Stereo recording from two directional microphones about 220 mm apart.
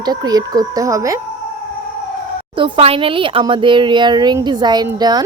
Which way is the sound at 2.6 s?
20° right (ahead or behind).